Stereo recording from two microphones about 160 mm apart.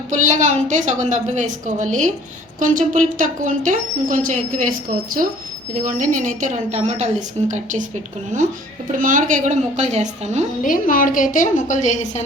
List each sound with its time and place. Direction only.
0.1 s speech: 50° right (ahead or behind)
5.7 s speech: 55° right (ahead or behind)
8.9 s speech: 55° right (ahead or behind)
10.6 s a woman's voice: 60° left (ahead or behind)